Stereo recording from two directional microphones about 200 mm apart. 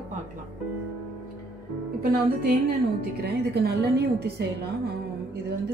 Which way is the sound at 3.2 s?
55° right (ahead or behind).